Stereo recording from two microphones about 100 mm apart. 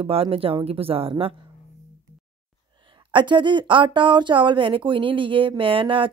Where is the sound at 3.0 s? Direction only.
55° right (ahead or behind).